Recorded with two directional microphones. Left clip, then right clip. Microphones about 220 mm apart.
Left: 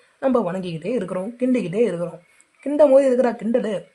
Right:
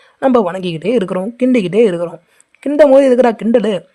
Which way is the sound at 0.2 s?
35° right (ahead or behind).